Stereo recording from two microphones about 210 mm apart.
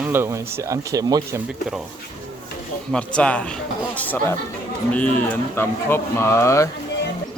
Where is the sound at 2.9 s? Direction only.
5° left (ahead or behind).